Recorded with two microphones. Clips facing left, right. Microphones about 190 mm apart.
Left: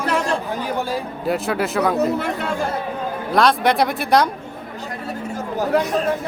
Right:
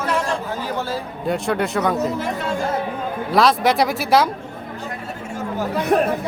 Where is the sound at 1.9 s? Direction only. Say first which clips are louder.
Left 3 dB; 60° left (ahead or behind).